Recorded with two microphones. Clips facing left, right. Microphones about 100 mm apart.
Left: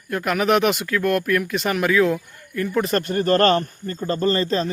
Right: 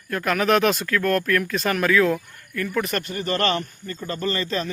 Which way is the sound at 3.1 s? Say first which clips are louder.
Left 6 dB; 40° left (ahead or behind).